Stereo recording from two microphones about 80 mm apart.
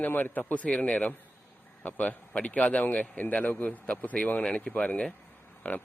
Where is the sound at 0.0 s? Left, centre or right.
Left.